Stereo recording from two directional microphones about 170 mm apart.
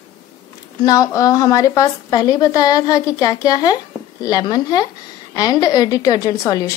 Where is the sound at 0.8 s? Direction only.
20° left (ahead or behind).